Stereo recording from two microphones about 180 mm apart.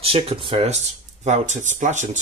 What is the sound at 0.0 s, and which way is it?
Speech, 30° right (ahead or behind).